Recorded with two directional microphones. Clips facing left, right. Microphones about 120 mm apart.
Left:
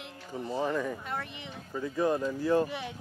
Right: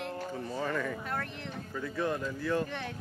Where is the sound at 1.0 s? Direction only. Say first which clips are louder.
Right 1 dB; centre (ahead or behind).